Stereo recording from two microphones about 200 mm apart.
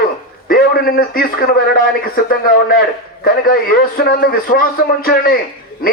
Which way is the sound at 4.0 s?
45° left (ahead or behind).